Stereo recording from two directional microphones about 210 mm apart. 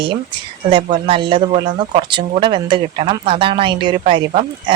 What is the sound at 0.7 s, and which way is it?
Speech, 25° right (ahead or behind).